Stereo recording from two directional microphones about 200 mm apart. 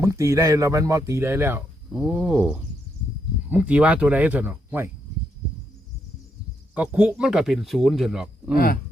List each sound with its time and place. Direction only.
0.0 s speech: 15° right (ahead or behind)
6.7 s speech: 5° right (ahead or behind)
8.5 s speech: 45° left (ahead or behind)